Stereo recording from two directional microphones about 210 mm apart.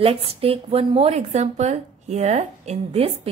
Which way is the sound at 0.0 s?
25° right (ahead or behind).